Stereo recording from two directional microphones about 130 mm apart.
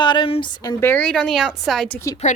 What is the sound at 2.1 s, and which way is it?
Speech, 25° left (ahead or behind).